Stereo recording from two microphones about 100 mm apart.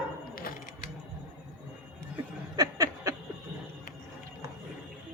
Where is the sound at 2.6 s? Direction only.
35° right (ahead or behind).